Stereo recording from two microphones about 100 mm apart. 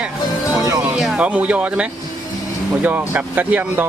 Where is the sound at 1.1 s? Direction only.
10° right (ahead or behind).